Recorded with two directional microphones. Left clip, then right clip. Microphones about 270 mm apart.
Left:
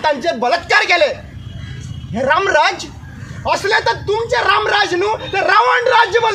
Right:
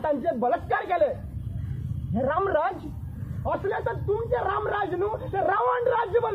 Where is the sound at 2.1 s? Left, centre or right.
Centre.